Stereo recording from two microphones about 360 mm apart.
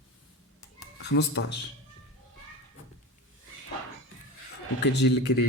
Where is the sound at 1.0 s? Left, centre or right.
Left.